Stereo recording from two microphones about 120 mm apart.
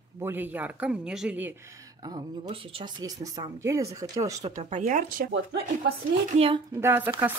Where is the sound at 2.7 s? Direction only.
35° right (ahead or behind).